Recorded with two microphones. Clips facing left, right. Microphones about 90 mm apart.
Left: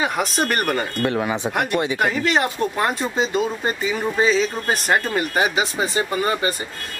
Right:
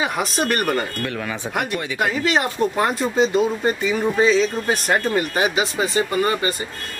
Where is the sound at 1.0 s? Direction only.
30° left (ahead or behind).